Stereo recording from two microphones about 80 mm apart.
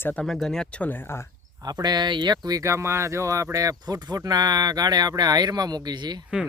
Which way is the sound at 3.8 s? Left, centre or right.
Right.